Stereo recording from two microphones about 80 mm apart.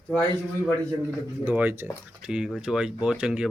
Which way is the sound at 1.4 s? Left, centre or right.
Right.